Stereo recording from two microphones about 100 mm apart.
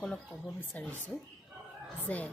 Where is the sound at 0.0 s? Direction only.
10° left (ahead or behind).